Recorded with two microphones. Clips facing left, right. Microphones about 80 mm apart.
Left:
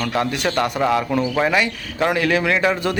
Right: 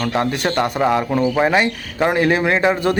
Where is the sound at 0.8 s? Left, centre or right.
Centre.